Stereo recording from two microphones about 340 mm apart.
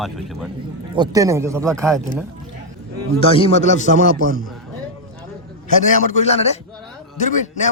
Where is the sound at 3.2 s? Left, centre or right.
Centre.